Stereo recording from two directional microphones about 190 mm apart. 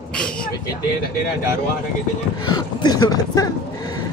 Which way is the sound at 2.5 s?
20° left (ahead or behind).